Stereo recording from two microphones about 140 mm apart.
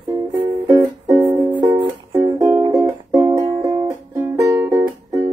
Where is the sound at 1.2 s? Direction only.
35° right (ahead or behind).